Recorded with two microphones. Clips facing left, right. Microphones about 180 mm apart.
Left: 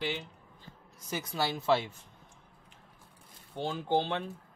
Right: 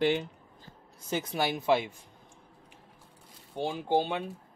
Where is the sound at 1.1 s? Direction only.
20° right (ahead or behind).